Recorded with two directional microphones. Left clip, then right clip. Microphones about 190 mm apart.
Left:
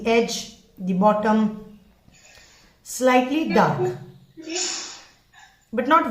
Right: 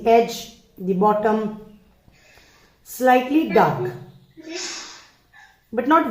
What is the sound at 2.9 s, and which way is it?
Speech, 40° right (ahead or behind).